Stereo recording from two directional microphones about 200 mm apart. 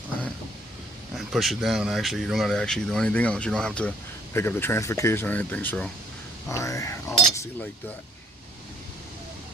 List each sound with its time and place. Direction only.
1.1 s speech: centre (ahead or behind); by 7.2 s 15° left (ahead or behind)